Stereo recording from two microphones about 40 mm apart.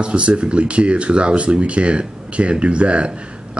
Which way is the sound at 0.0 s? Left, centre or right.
Right.